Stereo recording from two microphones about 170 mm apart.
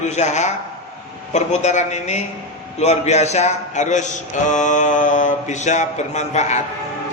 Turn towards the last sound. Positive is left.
turn(degrees=40)  # may be behind; listen again after turning